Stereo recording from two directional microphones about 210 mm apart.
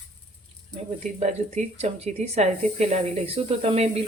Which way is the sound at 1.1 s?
30° right (ahead or behind).